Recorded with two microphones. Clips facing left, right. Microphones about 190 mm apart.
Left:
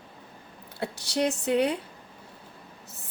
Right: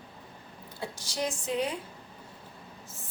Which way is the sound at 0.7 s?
65° left (ahead or behind).